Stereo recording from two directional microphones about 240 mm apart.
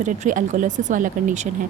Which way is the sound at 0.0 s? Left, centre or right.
Right.